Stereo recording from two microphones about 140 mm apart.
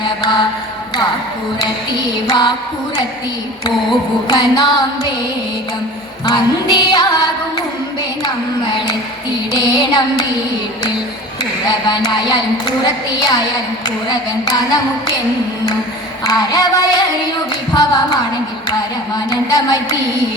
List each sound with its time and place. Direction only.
0.0 s mantra: 30° left (ahead or behind)
1.5 s music: 30° left (ahead or behind)
4.3 s a woman's voice: 30° left (ahead or behind)
6.2 s a woman's voice: 30° left (ahead or behind)
9.5 s child singing: 30° left (ahead or behind)
11.6 s a woman's voice: 30° left (ahead or behind)
16.2 s a woman's voice: 30° left (ahead or behind)